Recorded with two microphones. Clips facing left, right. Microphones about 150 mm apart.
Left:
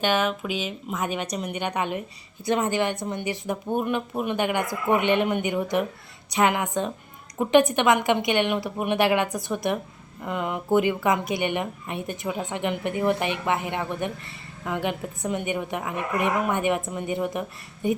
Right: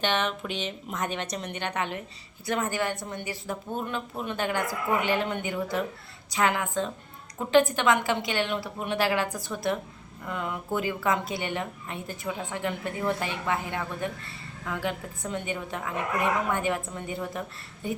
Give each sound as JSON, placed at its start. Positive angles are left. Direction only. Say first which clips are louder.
{"t": 0.0, "sound": "a woman's voice", "louder": "left 4 dB", "side_deg": 10}